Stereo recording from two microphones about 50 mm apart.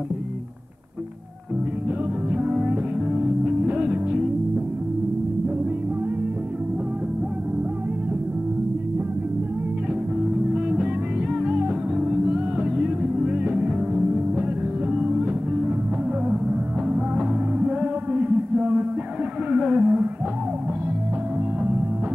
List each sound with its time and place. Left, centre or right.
2.7 s music: right
10.3 s music: centre
16.9 s music: right
19.5 s a sound: centre